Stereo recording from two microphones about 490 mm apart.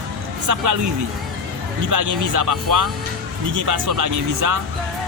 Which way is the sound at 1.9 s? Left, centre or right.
Right.